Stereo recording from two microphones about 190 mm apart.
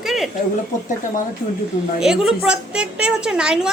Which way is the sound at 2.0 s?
5° right (ahead or behind).